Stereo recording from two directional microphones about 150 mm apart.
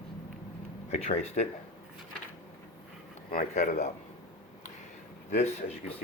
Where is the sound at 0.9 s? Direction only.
45° left (ahead or behind).